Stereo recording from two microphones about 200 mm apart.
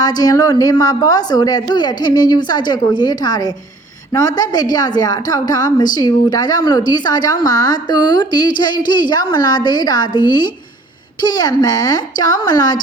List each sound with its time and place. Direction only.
0.0 s a woman's voice: 20° left (ahead or behind)